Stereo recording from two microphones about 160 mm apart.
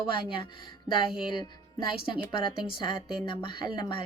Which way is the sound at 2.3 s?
30° left (ahead or behind).